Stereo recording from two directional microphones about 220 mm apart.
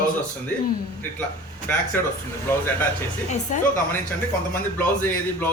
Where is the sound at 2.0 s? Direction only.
10° left (ahead or behind).